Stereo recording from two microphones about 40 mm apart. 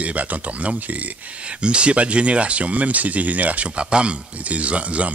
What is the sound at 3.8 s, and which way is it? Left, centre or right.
Speech, right.